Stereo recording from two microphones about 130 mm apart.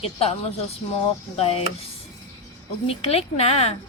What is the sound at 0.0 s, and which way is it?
Speech, 50° left (ahead or behind).